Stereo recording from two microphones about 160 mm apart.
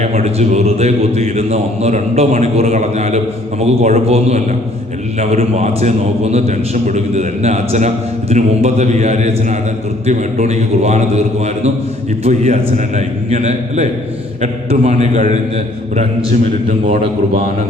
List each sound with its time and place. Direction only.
0.0 s a man's voice: 40° right (ahead or behind)
12.2 s a man's voice: 40° right (ahead or behind)